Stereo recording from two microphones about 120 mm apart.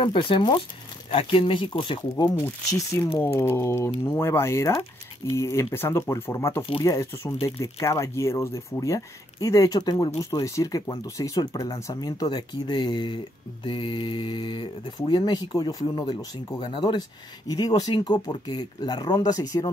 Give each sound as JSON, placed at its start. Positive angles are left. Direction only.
{"t": 0.0, "sound": "speech", "side_deg": 45}
{"t": 2.7, "sound": "speech", "side_deg": 25}